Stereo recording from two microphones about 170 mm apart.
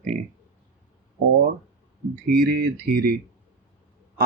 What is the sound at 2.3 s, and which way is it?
Speech, 65° right (ahead or behind).